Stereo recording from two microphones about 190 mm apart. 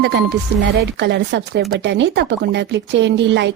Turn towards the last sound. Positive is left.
turn(degrees=-65)  # may be behind; listen again after turning